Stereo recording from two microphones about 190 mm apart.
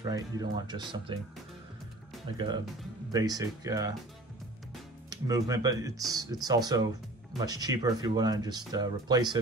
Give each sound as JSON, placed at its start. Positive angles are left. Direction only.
{"t": 0.0, "sound": "speech", "side_deg": -20}
{"t": 2.3, "sound": "speech", "side_deg": -25}
{"t": 5.1, "sound": "speech", "side_deg": -20}